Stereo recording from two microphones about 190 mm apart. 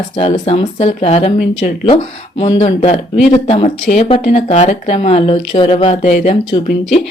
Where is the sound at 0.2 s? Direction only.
30° left (ahead or behind).